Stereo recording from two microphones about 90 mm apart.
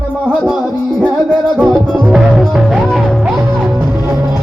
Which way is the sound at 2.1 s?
Centre (ahead or behind).